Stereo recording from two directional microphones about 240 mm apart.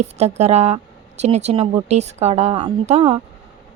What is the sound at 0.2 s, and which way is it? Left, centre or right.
A woman's voice, right.